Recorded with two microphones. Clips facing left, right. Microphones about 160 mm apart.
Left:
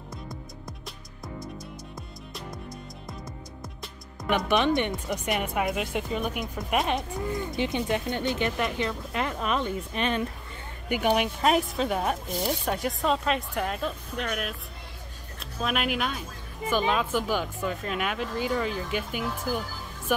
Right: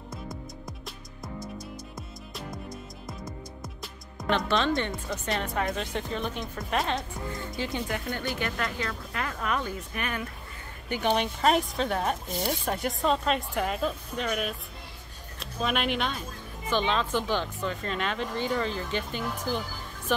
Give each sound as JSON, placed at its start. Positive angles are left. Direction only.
{"t": 0.7, "sound": "music", "side_deg": 0}
{"t": 3.1, "sound": "music", "side_deg": 0}
{"t": 4.3, "sound": "speech", "side_deg": 15}
{"t": 10.9, "sound": "speech", "side_deg": 10}